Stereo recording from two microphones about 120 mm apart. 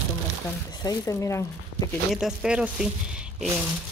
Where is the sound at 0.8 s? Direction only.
30° left (ahead or behind).